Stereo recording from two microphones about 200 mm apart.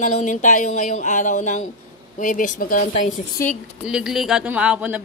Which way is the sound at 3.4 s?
15° left (ahead or behind).